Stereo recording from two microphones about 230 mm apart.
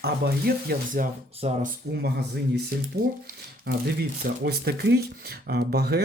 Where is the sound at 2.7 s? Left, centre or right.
Right.